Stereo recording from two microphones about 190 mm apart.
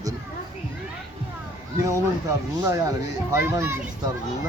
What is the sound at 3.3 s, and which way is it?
Speech, 15° right (ahead or behind).